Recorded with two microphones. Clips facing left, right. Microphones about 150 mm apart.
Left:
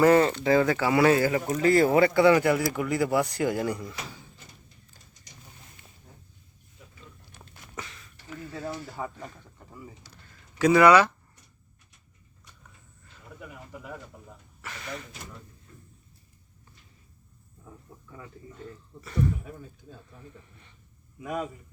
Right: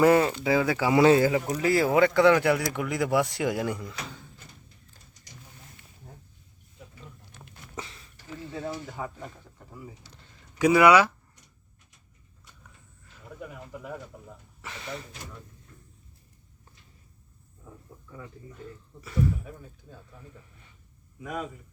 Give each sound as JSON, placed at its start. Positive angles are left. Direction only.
{"t": 0.0, "sound": "speech", "side_deg": -10}
{"t": 1.6, "sound": "speech", "side_deg": -5}
{"t": 7.8, "sound": "a sound", "side_deg": -25}
{"t": 9.0, "sound": "speech", "side_deg": 0}
{"t": 13.8, "sound": "a man's voice", "side_deg": -5}
{"t": 14.6, "sound": "a sound", "side_deg": -20}